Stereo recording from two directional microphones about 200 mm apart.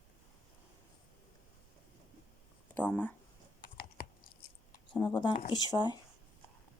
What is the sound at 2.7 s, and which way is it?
Speech, 5° left (ahead or behind).